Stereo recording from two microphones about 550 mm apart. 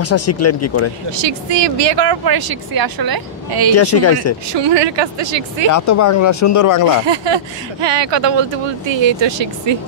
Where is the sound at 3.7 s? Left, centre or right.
Left.